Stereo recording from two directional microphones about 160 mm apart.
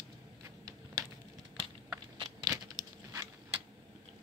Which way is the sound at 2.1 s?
25° right (ahead or behind).